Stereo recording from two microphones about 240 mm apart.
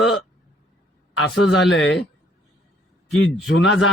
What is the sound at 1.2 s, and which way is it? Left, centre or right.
Speech, left.